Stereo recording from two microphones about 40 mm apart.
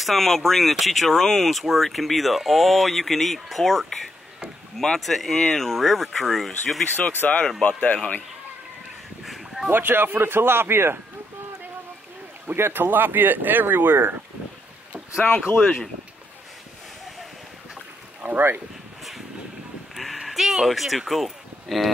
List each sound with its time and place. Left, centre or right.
0.0 s speech: centre
7.0 s speech: left
7.6 s speech: left
9.2 s a sound: centre
9.7 s speech: right
12.5 s speech: right
12.8 s speech: right
15.4 s speech: centre
18.2 s speech: right
20.2 s speech: centre